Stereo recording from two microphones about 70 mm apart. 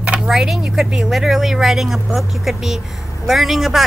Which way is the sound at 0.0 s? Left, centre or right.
Centre.